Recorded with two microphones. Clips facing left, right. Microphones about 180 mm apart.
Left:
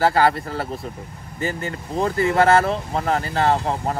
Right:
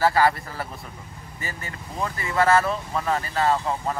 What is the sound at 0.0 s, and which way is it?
Speech, 30° left (ahead or behind).